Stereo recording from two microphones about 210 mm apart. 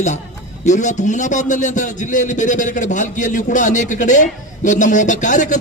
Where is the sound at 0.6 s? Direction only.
35° left (ahead or behind).